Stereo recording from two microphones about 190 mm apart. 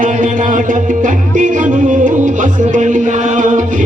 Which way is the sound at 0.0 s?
40° right (ahead or behind).